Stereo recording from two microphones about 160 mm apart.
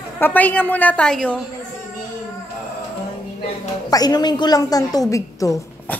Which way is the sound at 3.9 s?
25° left (ahead or behind).